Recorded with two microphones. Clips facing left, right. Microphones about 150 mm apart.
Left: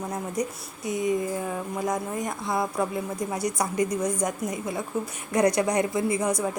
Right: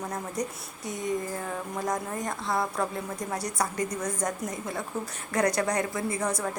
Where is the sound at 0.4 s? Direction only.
10° left (ahead or behind).